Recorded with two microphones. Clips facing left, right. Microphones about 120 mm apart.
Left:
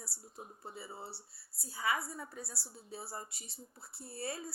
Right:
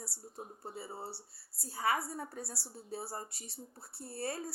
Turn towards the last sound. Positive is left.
turn(degrees=-40)  # may be behind; listen again after turning